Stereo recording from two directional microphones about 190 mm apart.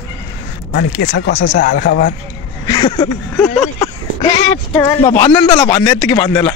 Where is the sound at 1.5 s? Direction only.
45° left (ahead or behind).